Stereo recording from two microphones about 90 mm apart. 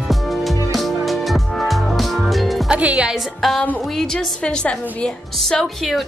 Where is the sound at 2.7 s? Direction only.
15° right (ahead or behind).